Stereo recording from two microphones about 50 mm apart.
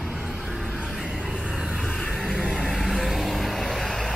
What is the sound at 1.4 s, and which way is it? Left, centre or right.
Vehicle, centre.